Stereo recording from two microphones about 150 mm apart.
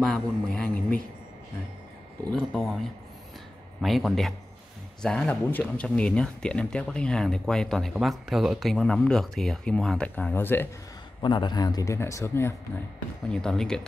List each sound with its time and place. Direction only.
0.0 s speech: 5° left (ahead or behind)
2.3 s speech: centre (ahead or behind)
3.8 s speech: centre (ahead or behind)
11.2 s speech: 30° left (ahead or behind)
13.3 s speech: 5° left (ahead or behind)